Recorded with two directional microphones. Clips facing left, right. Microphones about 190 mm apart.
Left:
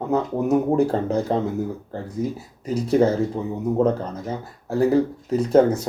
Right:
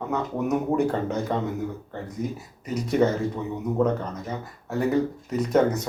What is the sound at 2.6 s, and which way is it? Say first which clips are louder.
Speech: left 4 dB; 30° left (ahead or behind).